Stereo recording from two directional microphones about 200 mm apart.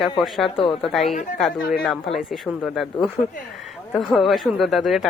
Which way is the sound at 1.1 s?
35° left (ahead or behind).